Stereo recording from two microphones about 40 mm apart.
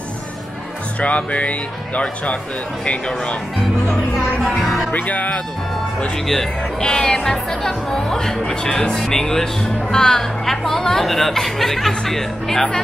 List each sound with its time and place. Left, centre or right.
1.0 s speech: left
4.6 s music: centre
4.9 s speech: left
6.8 s speech: left